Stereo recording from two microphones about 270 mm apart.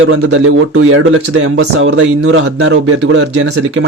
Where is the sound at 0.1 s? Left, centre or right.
Right.